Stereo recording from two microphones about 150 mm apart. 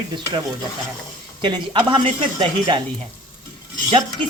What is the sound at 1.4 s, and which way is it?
Stir, 35° right (ahead or behind).